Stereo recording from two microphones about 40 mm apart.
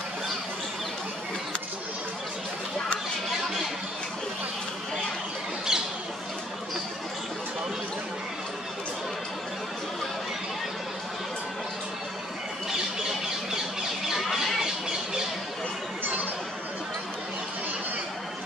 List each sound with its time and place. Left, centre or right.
5.7 s squawk: centre
14.0 s squawk: centre